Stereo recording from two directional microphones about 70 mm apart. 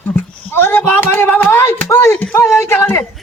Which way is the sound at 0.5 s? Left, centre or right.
Left.